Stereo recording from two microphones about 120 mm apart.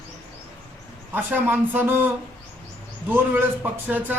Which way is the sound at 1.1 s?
15° right (ahead or behind).